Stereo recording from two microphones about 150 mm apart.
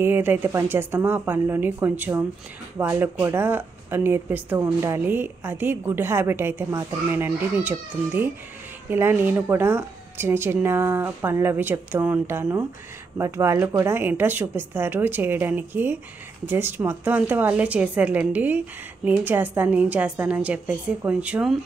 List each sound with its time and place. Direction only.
0.0 s a woman's voice: 15° right (ahead or behind)